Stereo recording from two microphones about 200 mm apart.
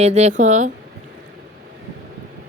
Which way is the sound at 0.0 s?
35° right (ahead or behind).